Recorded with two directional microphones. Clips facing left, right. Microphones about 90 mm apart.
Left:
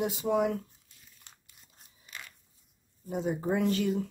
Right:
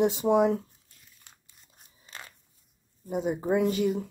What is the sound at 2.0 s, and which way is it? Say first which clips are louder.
Crunch: right 1 dB; 35° right (ahead or behind).